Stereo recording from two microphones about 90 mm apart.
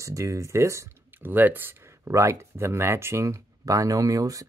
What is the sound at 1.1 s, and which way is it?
Speech, 20° right (ahead or behind).